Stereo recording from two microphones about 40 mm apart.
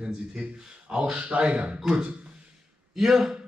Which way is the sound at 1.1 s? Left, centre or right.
Right.